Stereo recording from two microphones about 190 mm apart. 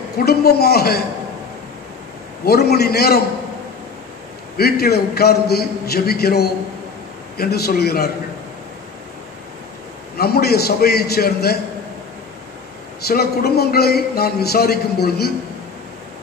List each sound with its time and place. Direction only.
0.2 s a man's voice: 55° left (ahead or behind)
2.4 s a man's voice: 55° left (ahead or behind)
4.6 s a man's voice: 55° left (ahead or behind)
10.1 s a man's voice: 55° left (ahead or behind)
13.0 s a man's voice: 55° left (ahead or behind)